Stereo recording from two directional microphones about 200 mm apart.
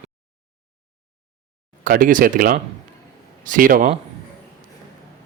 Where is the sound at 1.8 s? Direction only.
45° right (ahead or behind).